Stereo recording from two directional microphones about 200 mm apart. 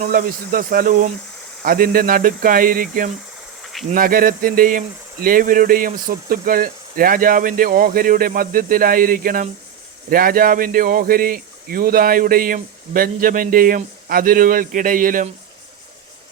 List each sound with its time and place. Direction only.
0.0 s speech: 45° right (ahead or behind)